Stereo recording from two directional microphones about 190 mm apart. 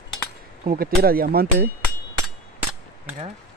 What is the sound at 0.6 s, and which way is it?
Speech, 50° right (ahead or behind).